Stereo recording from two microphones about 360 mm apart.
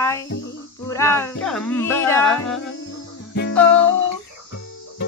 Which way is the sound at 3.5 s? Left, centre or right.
Centre.